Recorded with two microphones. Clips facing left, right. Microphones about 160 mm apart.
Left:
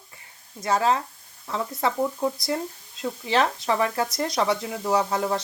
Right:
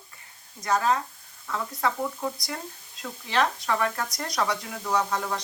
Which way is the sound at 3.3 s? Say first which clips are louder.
Left 2 dB; 30° left (ahead or behind).